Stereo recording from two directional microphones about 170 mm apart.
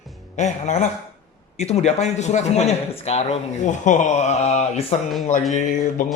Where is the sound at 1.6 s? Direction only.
40° left (ahead or behind).